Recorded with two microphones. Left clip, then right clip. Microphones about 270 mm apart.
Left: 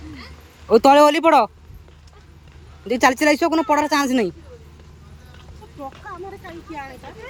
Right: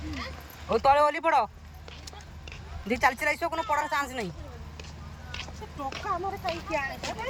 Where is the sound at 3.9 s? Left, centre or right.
Left.